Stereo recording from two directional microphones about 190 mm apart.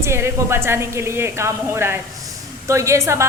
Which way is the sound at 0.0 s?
15° right (ahead or behind).